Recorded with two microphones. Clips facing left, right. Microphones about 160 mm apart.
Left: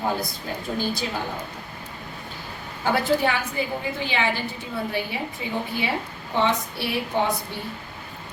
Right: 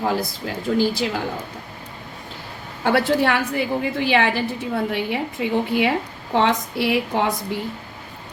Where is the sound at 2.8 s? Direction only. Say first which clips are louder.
Right 3 dB; 70° right (ahead or behind); by 7.6 s 90° right.